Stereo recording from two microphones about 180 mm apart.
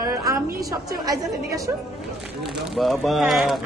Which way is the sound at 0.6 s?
20° right (ahead or behind).